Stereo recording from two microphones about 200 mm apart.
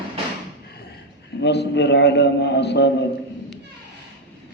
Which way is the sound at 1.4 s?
60° left (ahead or behind).